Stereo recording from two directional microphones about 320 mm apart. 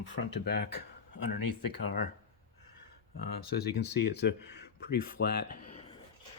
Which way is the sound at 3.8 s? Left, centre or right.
Left.